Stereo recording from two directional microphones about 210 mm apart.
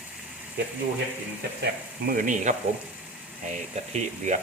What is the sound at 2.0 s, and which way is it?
Speech, 40° right (ahead or behind).